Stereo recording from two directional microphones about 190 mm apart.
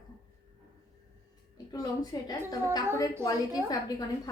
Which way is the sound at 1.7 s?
20° left (ahead or behind).